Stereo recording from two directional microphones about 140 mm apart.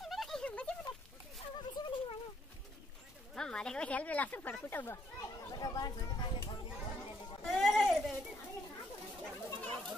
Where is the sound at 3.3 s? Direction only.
5° left (ahead or behind).